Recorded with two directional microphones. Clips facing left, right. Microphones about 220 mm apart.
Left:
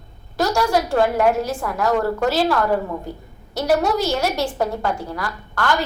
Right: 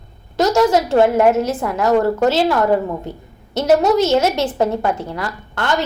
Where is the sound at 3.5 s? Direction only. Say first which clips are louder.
Right 5 dB; 20° right (ahead or behind).